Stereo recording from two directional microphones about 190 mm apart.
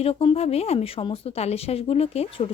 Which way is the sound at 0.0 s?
30° left (ahead or behind).